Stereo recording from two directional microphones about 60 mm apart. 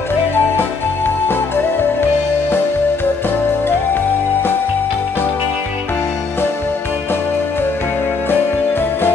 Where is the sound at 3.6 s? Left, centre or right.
Left.